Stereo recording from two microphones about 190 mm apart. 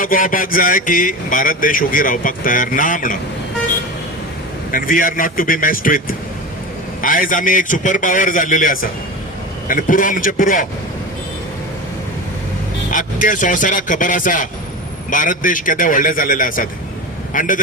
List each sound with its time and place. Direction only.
0.0 s speech: 45° left (ahead or behind)
4.7 s speech: 45° left (ahead or behind)
12.9 s speech: 45° left (ahead or behind)